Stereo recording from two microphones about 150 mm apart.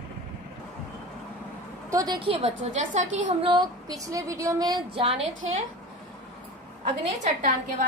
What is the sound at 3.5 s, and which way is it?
Speech, 25° right (ahead or behind).